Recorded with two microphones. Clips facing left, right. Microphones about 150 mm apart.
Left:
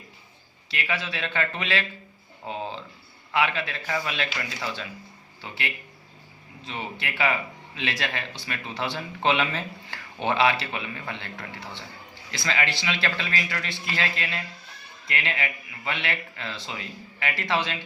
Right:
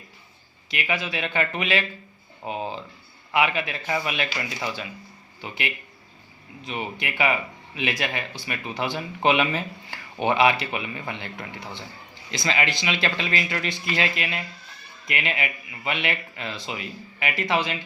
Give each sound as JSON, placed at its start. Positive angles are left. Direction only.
{"t": 0.7, "sound": "speech", "side_deg": -15}